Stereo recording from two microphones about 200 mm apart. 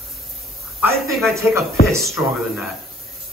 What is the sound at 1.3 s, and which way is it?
Speech, 15° right (ahead or behind).